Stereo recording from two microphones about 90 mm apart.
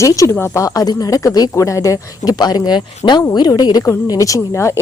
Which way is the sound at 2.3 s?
50° left (ahead or behind).